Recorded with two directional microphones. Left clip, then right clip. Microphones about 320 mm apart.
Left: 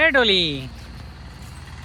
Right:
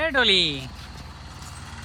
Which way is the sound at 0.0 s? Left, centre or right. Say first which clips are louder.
Left 3 dB; centre.